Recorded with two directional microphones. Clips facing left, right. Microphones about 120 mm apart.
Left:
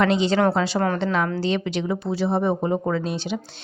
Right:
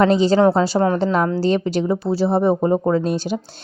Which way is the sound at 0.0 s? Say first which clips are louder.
Right 5 dB; 40° right (ahead or behind).